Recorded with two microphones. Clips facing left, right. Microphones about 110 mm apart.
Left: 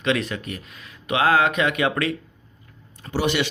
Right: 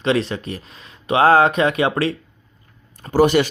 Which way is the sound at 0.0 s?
30° right (ahead or behind).